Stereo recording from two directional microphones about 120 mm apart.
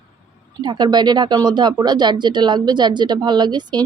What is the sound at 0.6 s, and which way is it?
A woman's voice, 35° right (ahead or behind).